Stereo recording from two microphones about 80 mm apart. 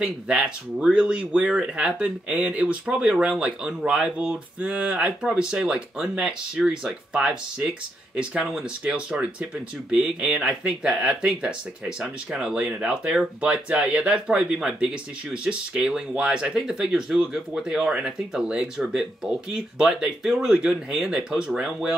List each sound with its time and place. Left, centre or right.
0.3 s speech: centre